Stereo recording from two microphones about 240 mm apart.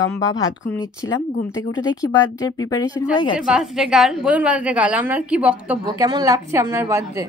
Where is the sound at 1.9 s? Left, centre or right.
Centre.